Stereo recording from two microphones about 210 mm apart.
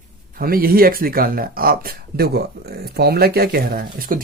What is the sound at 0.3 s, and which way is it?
Speech, 45° right (ahead or behind).